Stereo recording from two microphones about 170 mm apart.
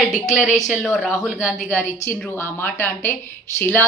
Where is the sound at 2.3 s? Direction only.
15° left (ahead or behind).